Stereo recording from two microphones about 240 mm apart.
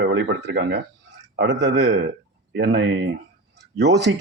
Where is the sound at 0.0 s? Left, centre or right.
Right.